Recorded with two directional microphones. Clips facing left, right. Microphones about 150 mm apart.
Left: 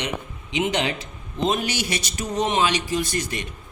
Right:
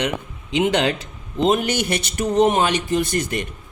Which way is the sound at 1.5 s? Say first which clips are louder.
Right 6 dB; 55° right (ahead or behind).